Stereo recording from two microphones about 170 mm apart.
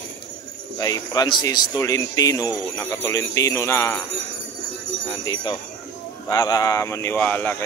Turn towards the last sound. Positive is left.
turn(degrees=10)  # may be behind; listen again after turning